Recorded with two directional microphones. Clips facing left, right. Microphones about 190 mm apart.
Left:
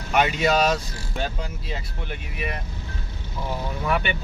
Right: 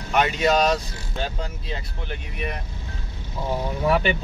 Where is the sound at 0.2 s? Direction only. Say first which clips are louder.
Right 1 dB; 5° left (ahead or behind).